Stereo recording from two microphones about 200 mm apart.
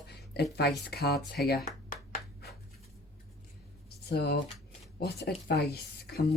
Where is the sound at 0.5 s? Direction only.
55° left (ahead or behind).